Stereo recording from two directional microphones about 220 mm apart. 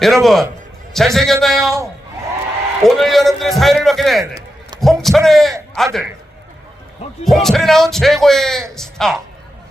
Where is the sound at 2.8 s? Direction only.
Centre (ahead or behind).